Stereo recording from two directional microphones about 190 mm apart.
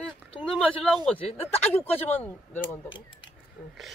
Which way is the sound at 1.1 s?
30° left (ahead or behind).